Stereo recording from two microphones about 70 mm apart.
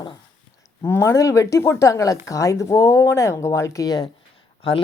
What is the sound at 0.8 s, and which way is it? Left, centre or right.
Speech, left.